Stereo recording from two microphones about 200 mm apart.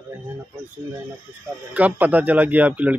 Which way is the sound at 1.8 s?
10° right (ahead or behind).